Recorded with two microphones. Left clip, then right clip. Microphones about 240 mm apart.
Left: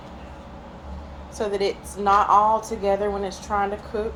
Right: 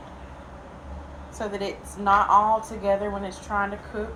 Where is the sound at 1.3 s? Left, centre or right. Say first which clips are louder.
Left 6 dB; left.